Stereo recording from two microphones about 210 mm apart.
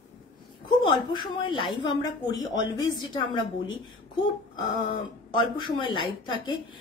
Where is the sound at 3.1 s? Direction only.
20° left (ahead or behind).